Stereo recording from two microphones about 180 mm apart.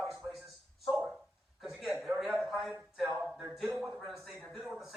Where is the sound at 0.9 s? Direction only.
Centre (ahead or behind).